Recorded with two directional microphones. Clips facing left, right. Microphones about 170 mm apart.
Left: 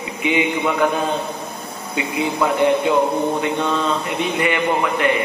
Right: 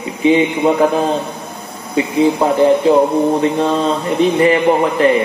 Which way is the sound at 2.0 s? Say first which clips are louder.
Right 7 dB; 30° right (ahead or behind).